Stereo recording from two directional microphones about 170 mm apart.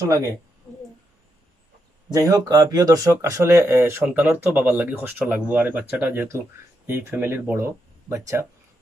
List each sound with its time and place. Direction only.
2.1 s speech: 20° right (ahead or behind)